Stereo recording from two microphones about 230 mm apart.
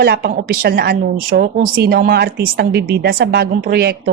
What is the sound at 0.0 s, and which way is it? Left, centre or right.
A woman's voice, right.